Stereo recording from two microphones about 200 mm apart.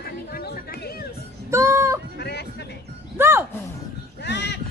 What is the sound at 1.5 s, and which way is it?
Speech, 15° right (ahead or behind).